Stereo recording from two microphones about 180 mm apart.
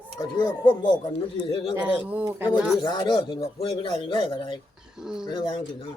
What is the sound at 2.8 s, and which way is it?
A man's voice, 25° left (ahead or behind).